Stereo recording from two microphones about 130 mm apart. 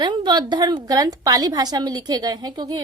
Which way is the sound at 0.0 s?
35° right (ahead or behind).